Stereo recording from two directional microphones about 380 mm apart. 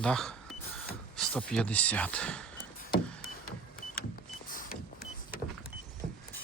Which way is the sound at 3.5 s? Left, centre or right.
Left.